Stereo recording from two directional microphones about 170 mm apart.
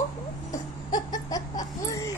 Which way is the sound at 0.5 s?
20° left (ahead or behind).